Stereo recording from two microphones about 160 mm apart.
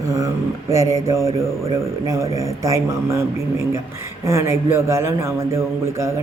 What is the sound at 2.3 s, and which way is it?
Speech, 20° right (ahead or behind).